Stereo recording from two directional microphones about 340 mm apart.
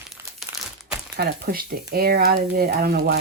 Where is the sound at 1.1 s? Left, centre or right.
Right.